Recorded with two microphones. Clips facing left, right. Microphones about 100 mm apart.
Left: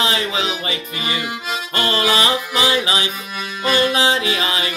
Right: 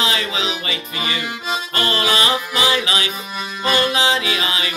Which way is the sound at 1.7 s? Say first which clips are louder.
Left 2 dB; 25° left (ahead or behind).